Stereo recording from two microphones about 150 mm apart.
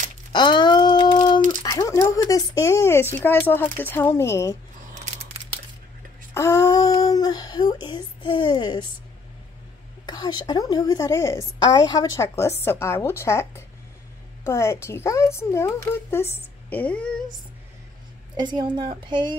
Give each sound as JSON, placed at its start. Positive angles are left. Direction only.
{"t": 0.3, "sound": "a sound", "side_deg": 30}
{"t": 1.6, "sound": "speech", "side_deg": 20}
{"t": 4.9, "sound": "scissors", "side_deg": -50}
{"t": 6.3, "sound": "speech", "side_deg": 20}
{"t": 10.0, "sound": "a woman's voice", "side_deg": 30}
{"t": 11.6, "sound": "a woman's voice", "side_deg": 30}
{"t": 18.3, "sound": "a woman's voice", "side_deg": -30}